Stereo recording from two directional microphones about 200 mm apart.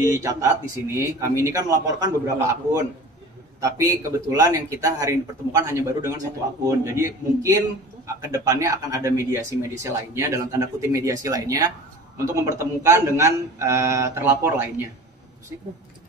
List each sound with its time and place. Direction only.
0.0 s speech: 15° right (ahead or behind)